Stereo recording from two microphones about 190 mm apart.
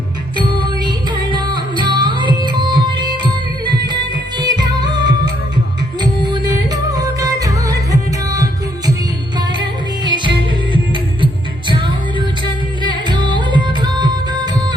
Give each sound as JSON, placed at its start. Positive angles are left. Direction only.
{"t": 0.3, "sound": "music", "side_deg": -25}
{"t": 9.6, "sound": "music", "side_deg": -25}
{"t": 12.8, "sound": "music", "side_deg": -25}